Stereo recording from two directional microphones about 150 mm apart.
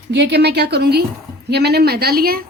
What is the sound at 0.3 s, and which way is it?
Speech, 90° right.